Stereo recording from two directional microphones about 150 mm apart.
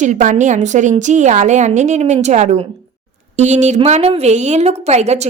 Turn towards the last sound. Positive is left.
turn(degrees=-45)  # may be behind; listen again after turning